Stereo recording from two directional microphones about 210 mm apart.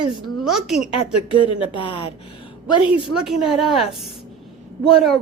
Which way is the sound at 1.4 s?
25° left (ahead or behind).